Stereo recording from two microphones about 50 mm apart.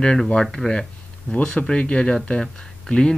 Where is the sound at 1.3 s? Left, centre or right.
Left.